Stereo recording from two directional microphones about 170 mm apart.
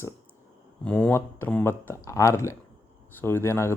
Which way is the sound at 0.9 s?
10° left (ahead or behind).